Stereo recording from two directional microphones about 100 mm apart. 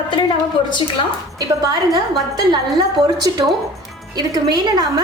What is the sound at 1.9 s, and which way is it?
A woman's voice, 45° right (ahead or behind).